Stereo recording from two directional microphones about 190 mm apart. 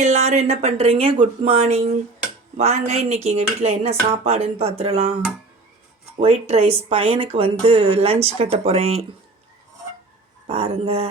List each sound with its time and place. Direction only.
0.0 s speech: 35° right (ahead or behind)
6.1 s speech: 35° right (ahead or behind)
10.4 s speech: 30° right (ahead or behind)